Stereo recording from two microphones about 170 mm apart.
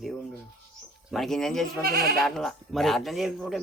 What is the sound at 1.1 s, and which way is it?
Speech, centre (ahead or behind).